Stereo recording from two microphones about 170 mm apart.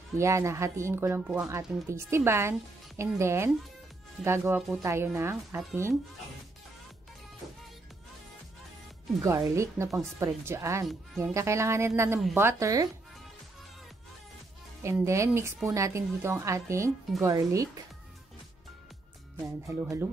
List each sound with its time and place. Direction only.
0.2 s a woman's voice: 15° right (ahead or behind)
9.2 s a woman's voice: 15° right (ahead or behind)
14.8 s a woman's voice: 15° right (ahead or behind)
19.4 s a woman's voice: 15° right (ahead or behind)